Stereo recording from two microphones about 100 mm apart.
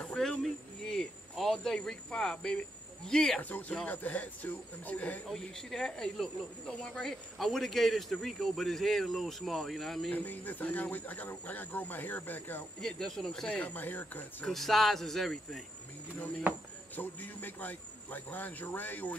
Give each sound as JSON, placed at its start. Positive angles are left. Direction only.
{"t": 0.0, "sound": "speech", "side_deg": 5}
{"t": 3.3, "sound": "speech", "side_deg": 15}
{"t": 5.3, "sound": "speech", "side_deg": 5}
{"t": 10.1, "sound": "speech", "side_deg": 20}
{"t": 12.8, "sound": "speech", "side_deg": 5}
{"t": 13.5, "sound": "speech", "side_deg": 15}
{"t": 14.4, "sound": "speech", "side_deg": 0}
{"t": 16.5, "sound": "speech", "side_deg": -20}
{"t": 16.9, "sound": "speech", "side_deg": 20}